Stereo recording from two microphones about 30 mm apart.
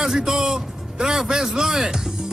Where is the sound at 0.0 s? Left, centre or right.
Centre.